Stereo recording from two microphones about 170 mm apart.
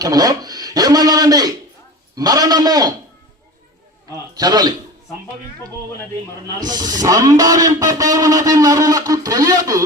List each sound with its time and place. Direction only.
0.0 s a man's voice: 20° right (ahead or behind)
4.4 s a man's voice: 20° right (ahead or behind)
6.6 s a man's voice: 25° right (ahead or behind)